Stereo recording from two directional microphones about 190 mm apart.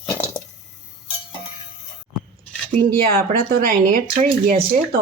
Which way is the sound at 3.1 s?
50° right (ahead or behind).